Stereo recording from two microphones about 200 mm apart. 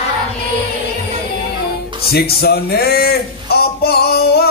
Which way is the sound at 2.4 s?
50° left (ahead or behind).